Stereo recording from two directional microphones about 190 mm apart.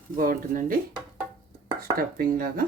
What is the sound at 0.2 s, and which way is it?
Speech, 45° right (ahead or behind).